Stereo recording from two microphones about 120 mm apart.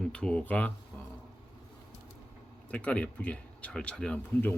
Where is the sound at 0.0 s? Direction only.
10° left (ahead or behind).